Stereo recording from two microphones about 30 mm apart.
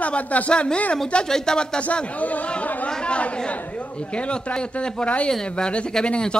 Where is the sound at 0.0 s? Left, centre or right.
Left.